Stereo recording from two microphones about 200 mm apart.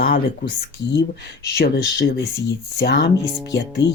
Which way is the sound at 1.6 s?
55° left (ahead or behind).